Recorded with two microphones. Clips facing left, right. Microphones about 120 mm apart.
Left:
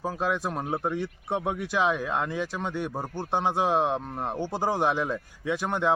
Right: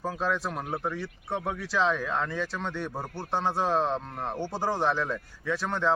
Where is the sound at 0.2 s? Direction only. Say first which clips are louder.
Left 2 dB; 15° left (ahead or behind).